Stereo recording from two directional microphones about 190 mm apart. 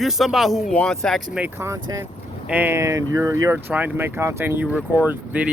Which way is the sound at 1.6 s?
15° right (ahead or behind).